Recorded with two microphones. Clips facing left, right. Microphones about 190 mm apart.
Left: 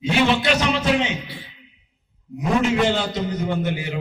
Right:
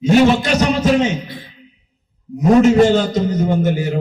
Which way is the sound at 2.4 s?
40° right (ahead or behind).